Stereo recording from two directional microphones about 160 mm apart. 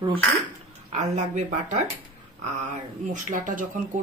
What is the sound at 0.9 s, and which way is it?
Speech, 45° right (ahead or behind).